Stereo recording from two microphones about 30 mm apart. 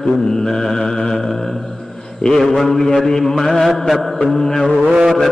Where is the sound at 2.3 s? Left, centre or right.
Centre.